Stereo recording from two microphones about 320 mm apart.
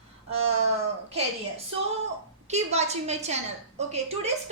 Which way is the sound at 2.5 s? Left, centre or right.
Centre.